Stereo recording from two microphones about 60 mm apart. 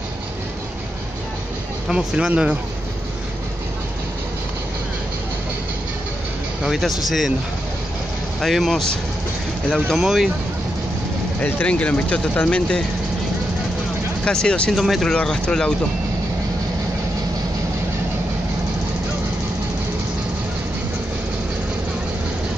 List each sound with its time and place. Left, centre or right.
1.9 s speech: centre
6.8 s speech: centre
8.4 s speech: centre
9.9 s speech: centre
11.6 s speech: left
14.2 s speech: centre
14.8 s speech: centre
15.1 s speech: centre